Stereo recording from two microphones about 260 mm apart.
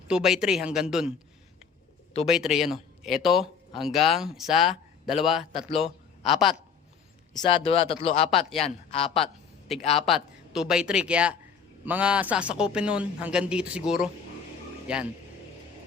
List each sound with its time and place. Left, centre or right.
0.1 s speech: centre
2.2 s a man's voice: centre
7.3 s speech: centre
9.2 s a sound: centre
10.1 s speech: centre